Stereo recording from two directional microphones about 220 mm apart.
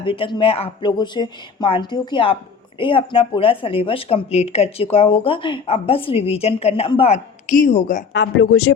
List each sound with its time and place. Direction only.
0.0 s speech: 25° left (ahead or behind)
8.1 s speech: 55° left (ahead or behind); by 8.7 s 70° left (ahead or behind)